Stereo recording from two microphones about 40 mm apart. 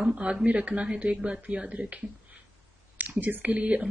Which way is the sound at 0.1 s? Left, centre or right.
Right.